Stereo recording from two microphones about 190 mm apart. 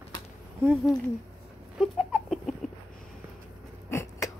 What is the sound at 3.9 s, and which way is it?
Rodents, 15° left (ahead or behind).